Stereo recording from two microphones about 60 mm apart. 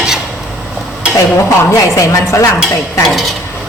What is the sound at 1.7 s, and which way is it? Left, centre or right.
Speech, left.